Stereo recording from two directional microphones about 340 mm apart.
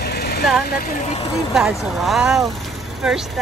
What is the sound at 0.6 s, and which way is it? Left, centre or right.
Speech, left.